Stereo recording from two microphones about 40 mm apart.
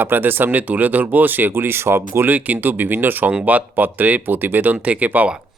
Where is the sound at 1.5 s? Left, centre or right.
Right.